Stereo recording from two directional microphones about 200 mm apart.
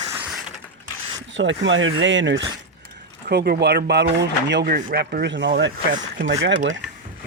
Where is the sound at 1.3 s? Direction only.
70° right (ahead or behind).